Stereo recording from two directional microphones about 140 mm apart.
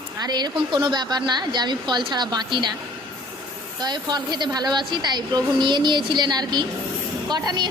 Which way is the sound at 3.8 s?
30° right (ahead or behind).